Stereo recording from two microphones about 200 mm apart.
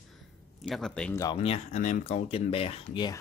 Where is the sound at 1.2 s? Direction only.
25° left (ahead or behind).